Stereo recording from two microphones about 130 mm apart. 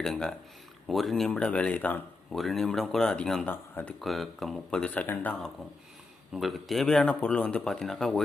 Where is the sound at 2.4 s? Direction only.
Centre (ahead or behind).